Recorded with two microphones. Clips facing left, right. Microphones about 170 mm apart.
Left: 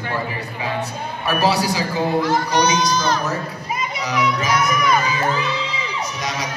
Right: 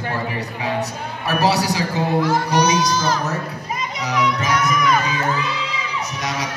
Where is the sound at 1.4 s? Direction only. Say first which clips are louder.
Even; 70° right (ahead or behind).